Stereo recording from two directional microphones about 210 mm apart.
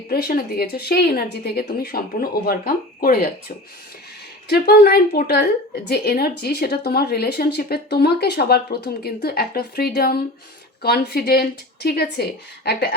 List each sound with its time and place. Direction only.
0.1 s speech: 45° left (ahead or behind)
4.4 s speech: 50° left (ahead or behind)